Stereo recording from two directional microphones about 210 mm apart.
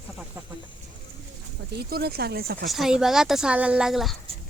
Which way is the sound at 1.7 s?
50° right (ahead or behind).